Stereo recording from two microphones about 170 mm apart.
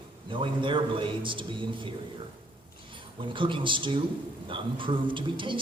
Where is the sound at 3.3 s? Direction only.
30° right (ahead or behind).